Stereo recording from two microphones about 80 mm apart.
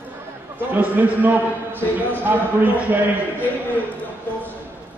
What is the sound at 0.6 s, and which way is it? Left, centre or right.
A man's voice, right.